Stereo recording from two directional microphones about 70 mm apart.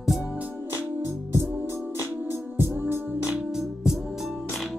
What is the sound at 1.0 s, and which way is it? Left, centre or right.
Music, right.